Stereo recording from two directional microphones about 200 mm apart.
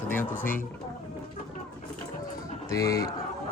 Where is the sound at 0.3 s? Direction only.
40° left (ahead or behind).